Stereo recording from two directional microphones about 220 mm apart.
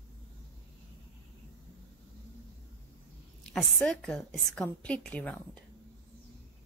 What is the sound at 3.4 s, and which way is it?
A woman's voice, 5° left (ahead or behind).